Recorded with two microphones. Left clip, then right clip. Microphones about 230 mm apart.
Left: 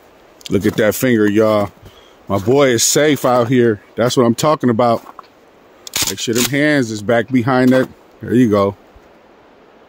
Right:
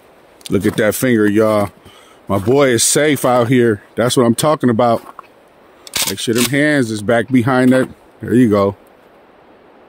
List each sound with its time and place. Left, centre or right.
0.4 s speech: centre
5.9 s camera: centre
6.5 s speech: centre